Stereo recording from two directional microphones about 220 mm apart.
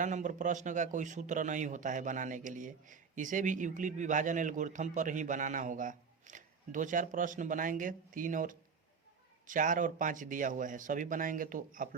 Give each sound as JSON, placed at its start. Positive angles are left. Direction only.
{"t": 0.0, "sound": "a man's voice", "side_deg": -35}